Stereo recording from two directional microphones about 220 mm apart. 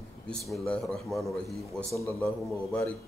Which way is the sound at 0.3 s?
Centre (ahead or behind).